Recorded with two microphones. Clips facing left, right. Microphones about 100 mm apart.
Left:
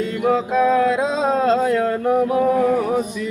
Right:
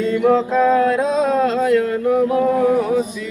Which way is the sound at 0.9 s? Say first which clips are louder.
Right 2 dB; 30° left (ahead or behind).